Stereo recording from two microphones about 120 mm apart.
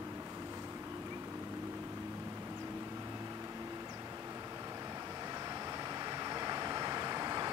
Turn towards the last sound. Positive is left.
turn(degrees=-35)  # may be behind; listen again after turning